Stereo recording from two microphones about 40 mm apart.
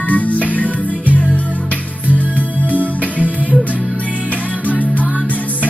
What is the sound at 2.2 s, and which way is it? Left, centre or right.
Music, left.